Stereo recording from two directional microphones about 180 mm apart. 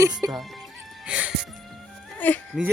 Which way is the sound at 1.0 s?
5° right (ahead or behind).